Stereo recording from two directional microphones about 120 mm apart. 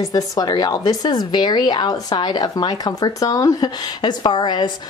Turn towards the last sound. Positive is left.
turn(degrees=40)  # may be behind; listen again after turning